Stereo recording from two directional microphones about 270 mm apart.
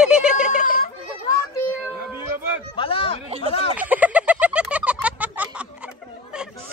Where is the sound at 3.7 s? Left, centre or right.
Centre.